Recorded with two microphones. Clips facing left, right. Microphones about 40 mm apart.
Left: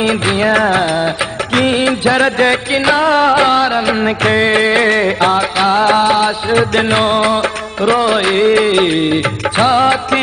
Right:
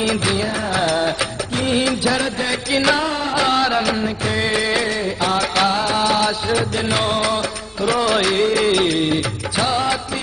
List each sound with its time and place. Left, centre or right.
0.0 s music: left
0.4 s music: left
0.8 s music: left
1.7 s music: left
2.2 s music: left
2.7 s music: left
3.1 s music: left
3.3 s music: left
4.0 s music: left
5.7 s music: left